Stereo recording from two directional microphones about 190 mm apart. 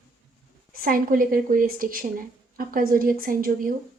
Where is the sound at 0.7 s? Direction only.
50° right (ahead or behind).